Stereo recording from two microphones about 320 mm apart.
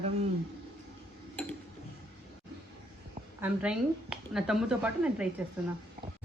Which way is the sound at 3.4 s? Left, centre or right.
Centre.